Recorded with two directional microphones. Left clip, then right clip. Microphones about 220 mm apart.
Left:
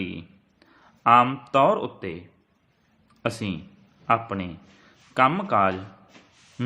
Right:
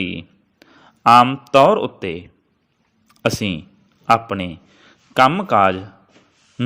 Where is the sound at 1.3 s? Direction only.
30° right (ahead or behind).